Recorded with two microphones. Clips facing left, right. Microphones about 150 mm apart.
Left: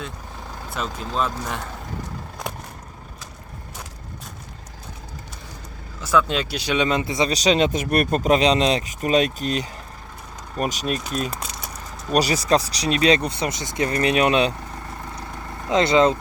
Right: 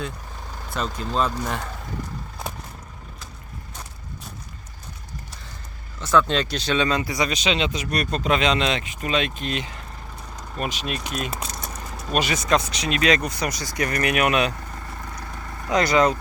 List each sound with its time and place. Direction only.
0.7 s speech: 5° left (ahead or behind)
6.0 s speech: 5° left (ahead or behind); by 7.3 s 25° left (ahead or behind)
7.3 s speech: 40° left (ahead or behind)
11.3 s typing: centre (ahead or behind)
12.1 s speech: 35° left (ahead or behind)
15.6 s speech: 25° left (ahead or behind)